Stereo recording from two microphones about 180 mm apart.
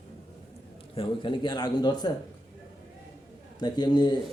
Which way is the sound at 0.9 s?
30° left (ahead or behind).